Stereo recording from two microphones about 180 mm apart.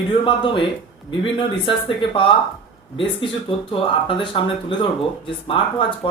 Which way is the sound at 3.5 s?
30° left (ahead or behind).